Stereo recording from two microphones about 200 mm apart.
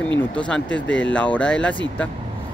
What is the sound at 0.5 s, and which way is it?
Speech, 5° left (ahead or behind).